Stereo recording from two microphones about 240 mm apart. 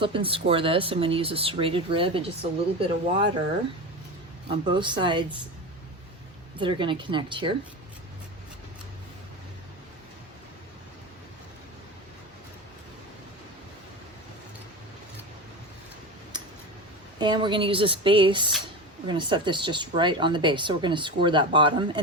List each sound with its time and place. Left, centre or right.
0.0 s speech: right
4.4 s speech: centre
6.6 s speech: right
17.2 s speech: centre